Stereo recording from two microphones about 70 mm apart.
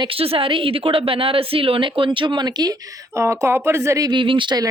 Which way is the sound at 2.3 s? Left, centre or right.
Right.